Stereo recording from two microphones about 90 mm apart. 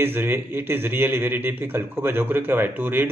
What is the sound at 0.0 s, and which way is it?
A man's voice, 25° right (ahead or behind).